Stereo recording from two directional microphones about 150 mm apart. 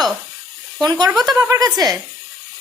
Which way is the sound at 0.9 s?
25° right (ahead or behind).